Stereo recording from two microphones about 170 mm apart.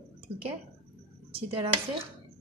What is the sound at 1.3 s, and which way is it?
Dishes, 35° right (ahead or behind).